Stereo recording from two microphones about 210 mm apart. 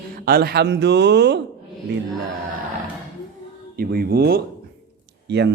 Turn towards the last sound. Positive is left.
turn(degrees=-55)  # may be behind; listen again after turning